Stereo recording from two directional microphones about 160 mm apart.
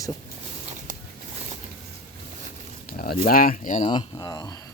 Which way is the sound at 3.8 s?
25° left (ahead or behind).